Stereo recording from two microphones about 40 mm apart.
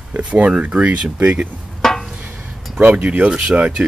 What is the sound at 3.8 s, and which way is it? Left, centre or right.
Speech, right.